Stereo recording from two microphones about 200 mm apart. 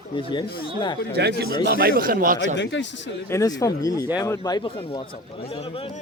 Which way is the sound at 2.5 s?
65° left (ahead or behind).